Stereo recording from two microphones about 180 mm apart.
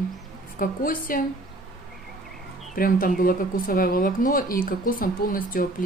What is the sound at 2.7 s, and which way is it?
Speech, 50° left (ahead or behind).